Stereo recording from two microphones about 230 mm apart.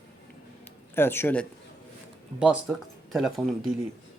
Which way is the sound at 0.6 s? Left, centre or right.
Centre.